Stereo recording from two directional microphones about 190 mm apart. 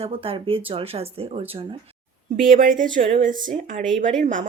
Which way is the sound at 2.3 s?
45° right (ahead or behind).